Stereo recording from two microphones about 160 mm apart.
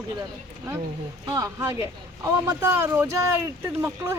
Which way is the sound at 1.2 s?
20° right (ahead or behind).